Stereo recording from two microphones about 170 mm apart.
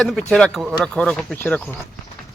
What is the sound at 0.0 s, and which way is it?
Speech, 5° left (ahead or behind).